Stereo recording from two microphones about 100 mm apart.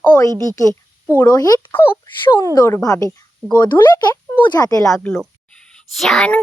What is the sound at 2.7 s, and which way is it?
Speech, 35° left (ahead or behind).